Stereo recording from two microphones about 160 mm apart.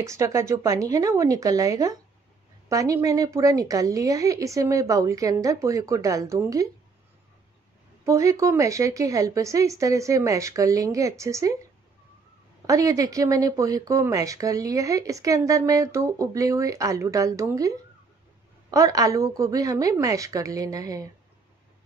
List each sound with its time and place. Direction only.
0.0 s speech: 20° right (ahead or behind)
8.0 s speech: 20° right (ahead or behind)
12.6 s speech: 20° right (ahead or behind)